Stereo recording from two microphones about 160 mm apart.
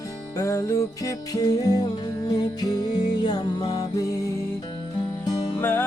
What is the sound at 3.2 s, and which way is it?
Music, 25° left (ahead or behind).